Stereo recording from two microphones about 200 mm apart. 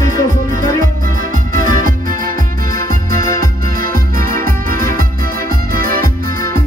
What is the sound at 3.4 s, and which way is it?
Music, 45° right (ahead or behind).